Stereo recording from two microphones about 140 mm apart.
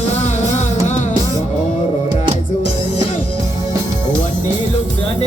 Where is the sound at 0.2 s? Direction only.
55° left (ahead or behind).